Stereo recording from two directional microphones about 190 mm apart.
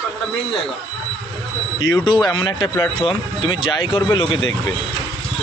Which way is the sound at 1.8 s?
20° left (ahead or behind).